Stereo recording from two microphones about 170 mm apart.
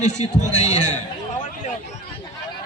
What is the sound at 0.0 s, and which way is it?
Speech, 45° left (ahead or behind).